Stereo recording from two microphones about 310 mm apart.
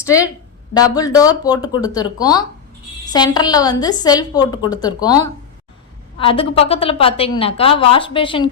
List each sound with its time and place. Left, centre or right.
0.0 s a woman's voice: centre